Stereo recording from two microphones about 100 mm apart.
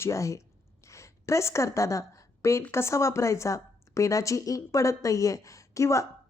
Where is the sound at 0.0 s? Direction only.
30° left (ahead or behind).